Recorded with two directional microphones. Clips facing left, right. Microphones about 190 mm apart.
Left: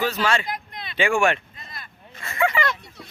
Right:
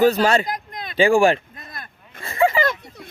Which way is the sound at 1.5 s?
50° right (ahead or behind).